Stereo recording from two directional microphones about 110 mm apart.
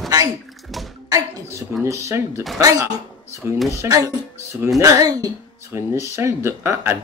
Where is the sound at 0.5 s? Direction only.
Centre (ahead or behind).